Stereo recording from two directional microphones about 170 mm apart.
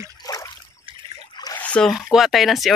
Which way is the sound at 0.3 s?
20° left (ahead or behind).